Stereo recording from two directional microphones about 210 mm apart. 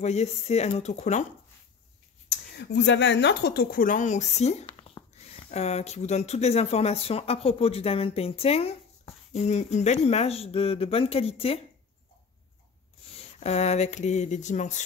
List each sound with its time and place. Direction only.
0.0 s speech: 30° left (ahead or behind)
2.2 s speech: 55° left (ahead or behind); by 11.6 s 25° left (ahead or behind)
13.4 s speech: 30° left (ahead or behind)